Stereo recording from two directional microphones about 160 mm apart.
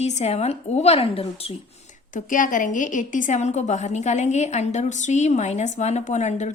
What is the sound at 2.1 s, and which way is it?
A woman's voice, 55° left (ahead or behind).